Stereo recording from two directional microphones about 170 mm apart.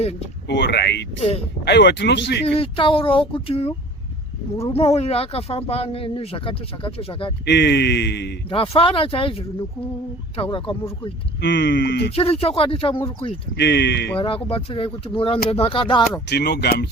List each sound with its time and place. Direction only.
0.4 s speech: 90° left
2.5 s speech: 30° left (ahead or behind)
7.4 s speech: 85° left
8.4 s speech: 35° left (ahead or behind)
11.3 s speech: 90° left
12.1 s speech: 35° left (ahead or behind)
13.6 s speech: 80° left
14.2 s speech: 30° left (ahead or behind)
16.3 s speech: 70° left (ahead or behind)